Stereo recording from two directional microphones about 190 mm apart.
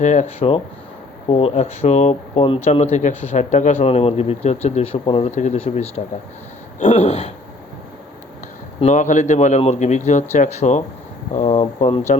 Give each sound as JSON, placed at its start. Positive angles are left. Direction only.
{"t": 0.0, "sound": "speech", "side_deg": 40}
{"t": 8.8, "sound": "speech", "side_deg": 40}